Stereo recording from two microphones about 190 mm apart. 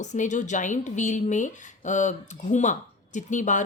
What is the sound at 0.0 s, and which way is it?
A woman's voice, 40° left (ahead or behind).